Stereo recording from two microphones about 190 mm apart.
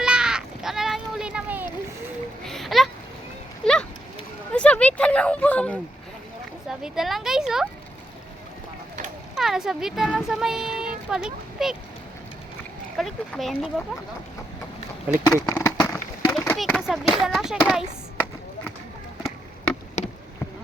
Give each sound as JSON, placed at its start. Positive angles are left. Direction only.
{"t": 0.0, "sound": "a sound", "side_deg": -5}
{"t": 2.4, "sound": "a sound", "side_deg": 0}
{"t": 6.7, "sound": "speech", "side_deg": 0}
{"t": 9.3, "sound": "speech", "side_deg": 0}
{"t": 13.0, "sound": "speech", "side_deg": 0}
{"t": 15.1, "sound": "speech", "side_deg": -5}
{"t": 15.4, "sound": "a sound", "side_deg": 10}
{"t": 16.6, "sound": "speech", "side_deg": 0}
{"t": 20.0, "sound": "insect", "side_deg": 40}